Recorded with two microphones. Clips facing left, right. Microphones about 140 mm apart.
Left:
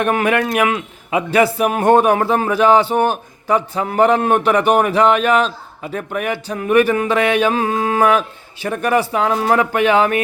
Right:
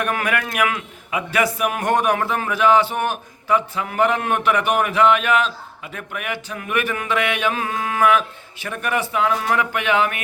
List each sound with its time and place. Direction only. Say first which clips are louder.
0.0 s a man's voice: left 6 dB; 25° left (ahead or behind)